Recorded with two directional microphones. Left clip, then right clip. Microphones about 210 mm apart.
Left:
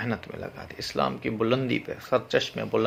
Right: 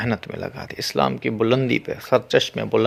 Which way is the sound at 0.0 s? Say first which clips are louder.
Right 6 dB; 45° right (ahead or behind).